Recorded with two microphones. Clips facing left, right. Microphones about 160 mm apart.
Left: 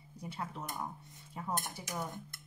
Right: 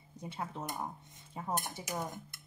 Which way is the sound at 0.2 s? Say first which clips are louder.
Right 1 dB; 25° right (ahead or behind).